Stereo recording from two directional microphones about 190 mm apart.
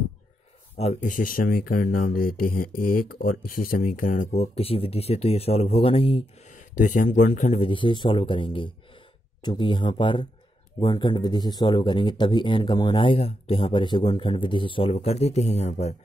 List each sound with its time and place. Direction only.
0.7 s speech: 40° left (ahead or behind)
6.7 s speech: 45° left (ahead or behind)